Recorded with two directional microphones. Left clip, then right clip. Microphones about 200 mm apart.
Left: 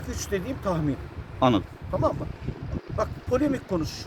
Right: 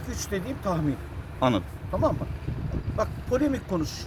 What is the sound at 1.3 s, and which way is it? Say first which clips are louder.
Speech: left 2 dB; 50° left (ahead or behind).